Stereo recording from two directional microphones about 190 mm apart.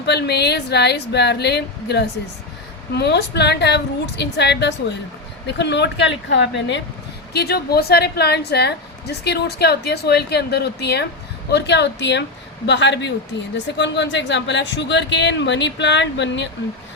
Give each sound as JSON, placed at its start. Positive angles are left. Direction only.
{"t": 0.0, "sound": "a woman's voice", "side_deg": 60}
{"t": 7.3, "sound": "a woman's voice", "side_deg": 55}